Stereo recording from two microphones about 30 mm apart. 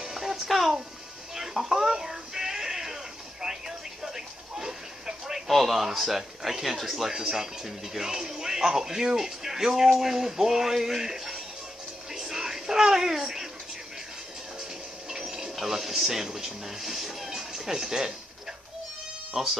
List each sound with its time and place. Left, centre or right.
0.1 s music: centre
0.5 s speech: centre
1.3 s music: centre
5.5 s speech: centre
7.1 s speech: centre
12.1 s a sound: centre
15.0 s a sound: centre
15.5 s speech: centre
17.3 s music: centre
17.6 s speech: centre
19.4 s speech: centre